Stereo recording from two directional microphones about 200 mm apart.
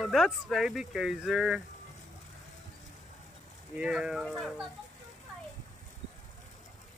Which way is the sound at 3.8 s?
5° right (ahead or behind).